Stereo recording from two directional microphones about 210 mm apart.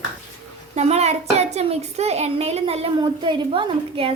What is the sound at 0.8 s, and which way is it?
A child's voice, 30° right (ahead or behind).